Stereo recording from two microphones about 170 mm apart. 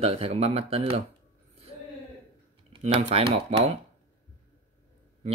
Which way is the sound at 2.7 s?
40° right (ahead or behind).